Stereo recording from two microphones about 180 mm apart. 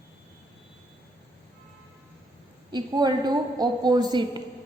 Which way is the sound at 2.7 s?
25° right (ahead or behind).